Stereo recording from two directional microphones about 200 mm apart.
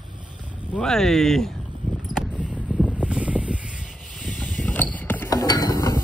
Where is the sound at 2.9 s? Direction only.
5° right (ahead or behind); by 6.0 s 15° left (ahead or behind).